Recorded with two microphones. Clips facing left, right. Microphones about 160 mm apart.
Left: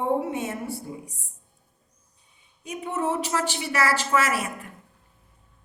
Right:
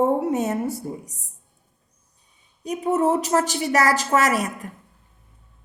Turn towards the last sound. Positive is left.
turn(degrees=-40)  # may be behind; listen again after turning